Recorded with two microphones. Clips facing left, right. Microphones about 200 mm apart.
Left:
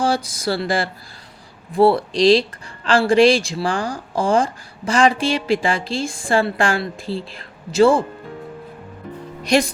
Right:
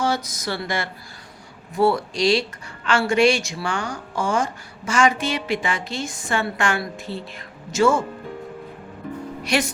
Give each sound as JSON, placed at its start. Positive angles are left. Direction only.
{"t": 0.0, "sound": "speech", "side_deg": 30}
{"t": 9.4, "sound": "speech", "side_deg": 35}